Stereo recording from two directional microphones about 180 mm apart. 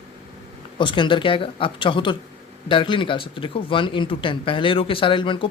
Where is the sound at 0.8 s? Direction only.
25° left (ahead or behind).